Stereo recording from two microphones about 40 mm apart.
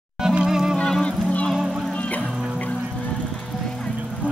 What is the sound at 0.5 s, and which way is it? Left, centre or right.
Music, centre.